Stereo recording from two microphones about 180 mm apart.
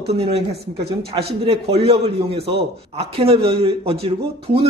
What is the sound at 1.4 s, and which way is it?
A man's voice, 35° right (ahead or behind).